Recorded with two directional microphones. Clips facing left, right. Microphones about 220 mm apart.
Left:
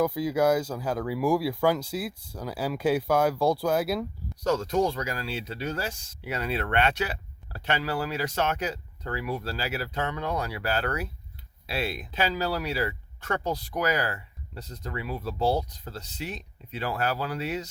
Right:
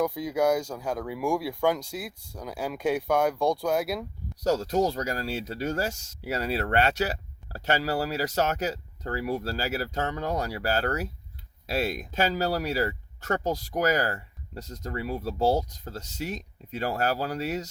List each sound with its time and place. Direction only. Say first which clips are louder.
0.0 s speech: left 1 dB; 5° left (ahead or behind)
4.4 s speech: right 1 dB; 40° right (ahead or behind)